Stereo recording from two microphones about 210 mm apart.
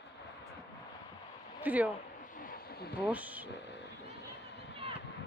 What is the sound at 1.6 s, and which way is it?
Speech, 5° right (ahead or behind).